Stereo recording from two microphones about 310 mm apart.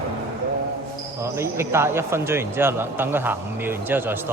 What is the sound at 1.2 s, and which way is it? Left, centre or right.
Speech, centre.